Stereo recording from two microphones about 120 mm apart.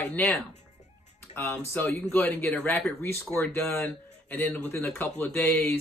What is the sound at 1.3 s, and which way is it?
Speech, 20° left (ahead or behind).